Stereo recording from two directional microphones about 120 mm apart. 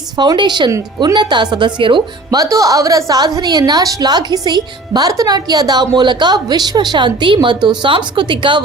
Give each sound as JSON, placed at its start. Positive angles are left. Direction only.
{"t": 0.2, "sound": "a woman's voice", "side_deg": -40}
{"t": 2.4, "sound": "a woman's voice", "side_deg": -30}